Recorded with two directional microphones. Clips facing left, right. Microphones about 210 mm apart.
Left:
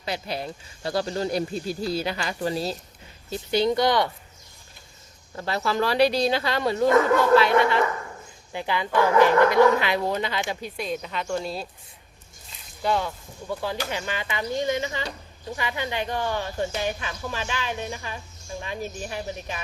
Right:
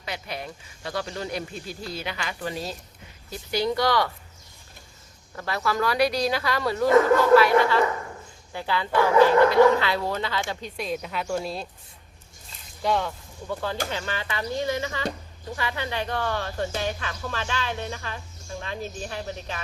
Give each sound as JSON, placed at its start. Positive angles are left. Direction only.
{"t": 0.0, "sound": "speech", "side_deg": 30}
{"t": 5.3, "sound": "speech", "side_deg": 25}
{"t": 10.8, "sound": "speech", "side_deg": 0}
{"t": 12.8, "sound": "speech", "side_deg": 0}